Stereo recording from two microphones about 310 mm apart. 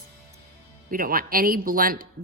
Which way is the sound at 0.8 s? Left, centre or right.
Right.